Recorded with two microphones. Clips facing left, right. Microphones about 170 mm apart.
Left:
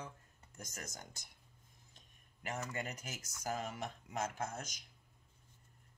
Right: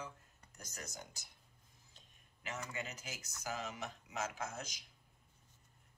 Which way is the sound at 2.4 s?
50° left (ahead or behind).